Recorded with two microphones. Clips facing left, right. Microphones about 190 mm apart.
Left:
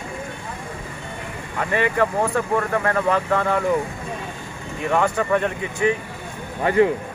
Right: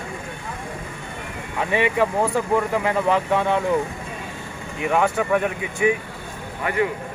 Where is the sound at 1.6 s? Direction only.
10° right (ahead or behind).